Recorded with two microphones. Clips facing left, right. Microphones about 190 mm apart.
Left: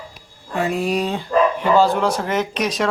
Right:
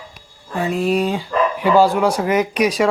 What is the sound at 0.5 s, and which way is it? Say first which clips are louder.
Speech: right 2 dB; centre (ahead or behind).